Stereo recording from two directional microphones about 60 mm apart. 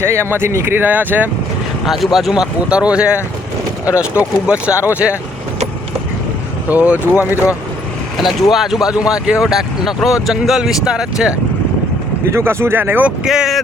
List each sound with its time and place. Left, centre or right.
0.0 s speech: right
1.8 s speech: centre
2.3 s speech: centre
4.2 s speech: right
6.7 s speech: right
7.0 s speech: left
8.2 s speech: centre
12.3 s speech: right
13.2 s speech: centre